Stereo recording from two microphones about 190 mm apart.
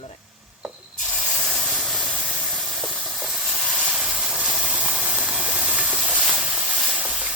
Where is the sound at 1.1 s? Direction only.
5° right (ahead or behind).